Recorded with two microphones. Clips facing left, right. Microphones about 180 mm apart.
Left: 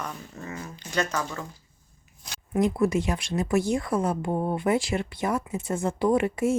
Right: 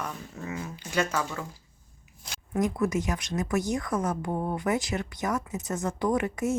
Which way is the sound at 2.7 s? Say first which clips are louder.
Left 3 dB; 30° left (ahead or behind).